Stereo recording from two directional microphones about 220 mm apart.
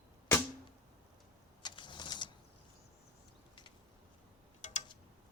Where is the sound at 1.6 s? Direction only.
20° left (ahead or behind).